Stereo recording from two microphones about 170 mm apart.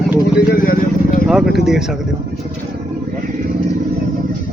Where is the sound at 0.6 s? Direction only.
55° left (ahead or behind).